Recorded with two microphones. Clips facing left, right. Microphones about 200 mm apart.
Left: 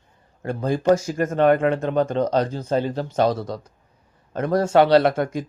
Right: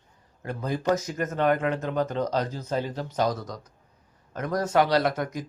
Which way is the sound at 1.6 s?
60° left (ahead or behind).